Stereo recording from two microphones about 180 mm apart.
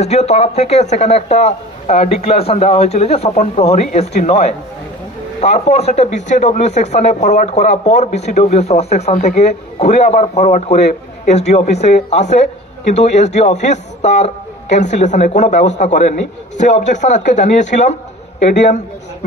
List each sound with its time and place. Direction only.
0.0 s a man's voice: 35° left (ahead or behind)